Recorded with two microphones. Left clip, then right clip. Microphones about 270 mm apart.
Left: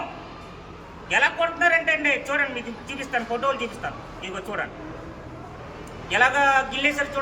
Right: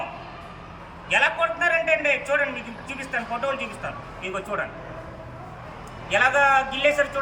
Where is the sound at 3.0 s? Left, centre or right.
Centre.